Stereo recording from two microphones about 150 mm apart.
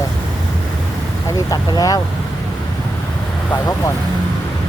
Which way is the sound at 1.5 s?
25° left (ahead or behind).